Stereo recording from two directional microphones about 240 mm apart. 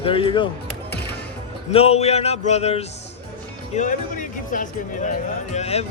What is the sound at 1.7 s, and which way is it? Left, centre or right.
Speech, left.